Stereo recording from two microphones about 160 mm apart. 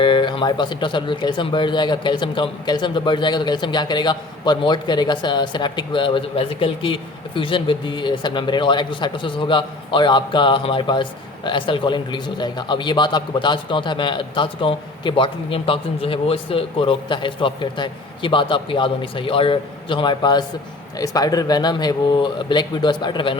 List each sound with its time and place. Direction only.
0.0 s speech: 30° left (ahead or behind)